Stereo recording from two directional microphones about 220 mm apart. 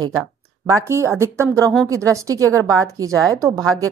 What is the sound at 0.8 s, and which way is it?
Speech, 10° right (ahead or behind).